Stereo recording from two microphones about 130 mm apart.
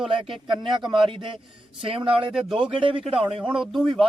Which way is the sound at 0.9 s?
40° right (ahead or behind).